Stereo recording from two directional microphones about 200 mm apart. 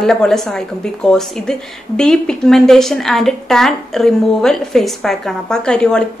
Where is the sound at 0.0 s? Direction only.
Centre (ahead or behind).